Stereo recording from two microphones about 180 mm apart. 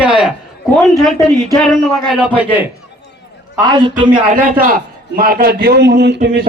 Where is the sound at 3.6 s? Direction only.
25° right (ahead or behind).